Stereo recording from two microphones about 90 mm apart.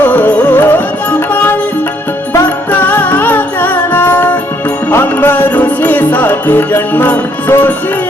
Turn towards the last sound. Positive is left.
turn(degrees=20)  # may be behind; listen again after turning